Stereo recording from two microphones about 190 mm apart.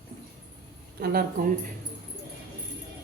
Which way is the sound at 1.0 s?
50° right (ahead or behind).